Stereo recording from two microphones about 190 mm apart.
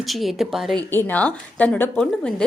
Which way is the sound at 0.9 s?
10° left (ahead or behind).